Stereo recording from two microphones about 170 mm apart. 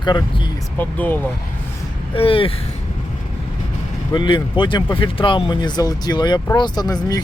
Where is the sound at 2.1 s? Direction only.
35° left (ahead or behind).